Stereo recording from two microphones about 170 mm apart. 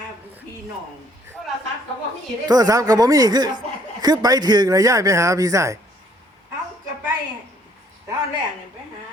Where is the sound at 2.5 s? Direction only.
20° right (ahead or behind).